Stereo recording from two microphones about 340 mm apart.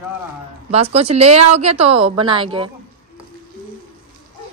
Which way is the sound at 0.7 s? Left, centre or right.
Centre.